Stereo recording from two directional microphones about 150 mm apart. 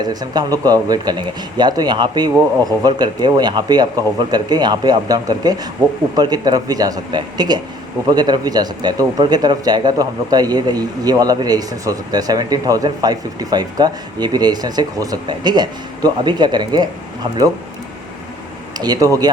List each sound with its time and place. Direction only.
0.0 s speech: 25° right (ahead or behind)
18.8 s speech: 25° right (ahead or behind)